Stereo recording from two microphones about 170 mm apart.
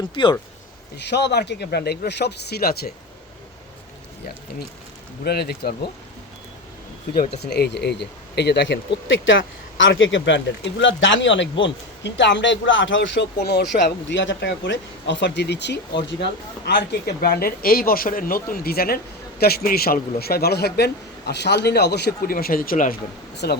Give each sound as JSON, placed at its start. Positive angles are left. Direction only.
{"t": 0.1, "sound": "speech", "side_deg": 30}
{"t": 1.1, "sound": "a man's voice", "side_deg": 85}
{"t": 5.2, "sound": "a man's voice", "side_deg": 70}
{"t": 7.3, "sound": "a man's voice", "side_deg": 75}
{"t": 16.6, "sound": "a man's voice", "side_deg": 75}